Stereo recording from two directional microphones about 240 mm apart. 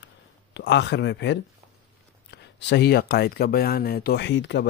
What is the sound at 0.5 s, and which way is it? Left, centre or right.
Speech, left.